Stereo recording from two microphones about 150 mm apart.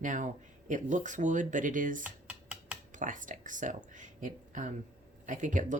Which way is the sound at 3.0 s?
60° right (ahead or behind).